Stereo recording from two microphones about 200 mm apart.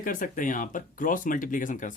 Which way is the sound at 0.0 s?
40° left (ahead or behind).